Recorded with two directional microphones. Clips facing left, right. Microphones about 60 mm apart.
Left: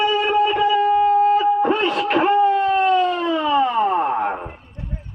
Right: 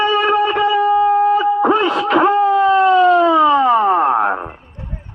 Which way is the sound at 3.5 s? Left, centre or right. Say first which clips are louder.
Right 5 dB; right.